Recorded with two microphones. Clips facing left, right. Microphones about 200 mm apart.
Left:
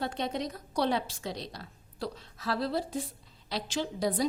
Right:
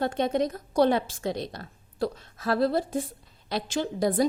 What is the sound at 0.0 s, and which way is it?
A woman's voice, 50° right (ahead or behind).